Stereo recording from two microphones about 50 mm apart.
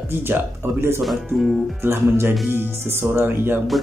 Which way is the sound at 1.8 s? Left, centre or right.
Right.